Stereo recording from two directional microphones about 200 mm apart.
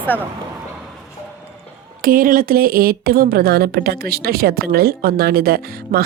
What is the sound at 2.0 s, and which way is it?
Speech, 45° right (ahead or behind).